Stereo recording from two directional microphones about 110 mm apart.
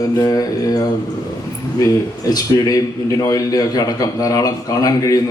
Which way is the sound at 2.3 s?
35° left (ahead or behind).